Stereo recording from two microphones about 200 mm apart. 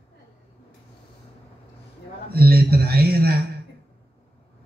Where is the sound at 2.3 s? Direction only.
50° right (ahead or behind).